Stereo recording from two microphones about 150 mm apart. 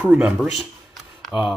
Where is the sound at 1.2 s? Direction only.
5° right (ahead or behind).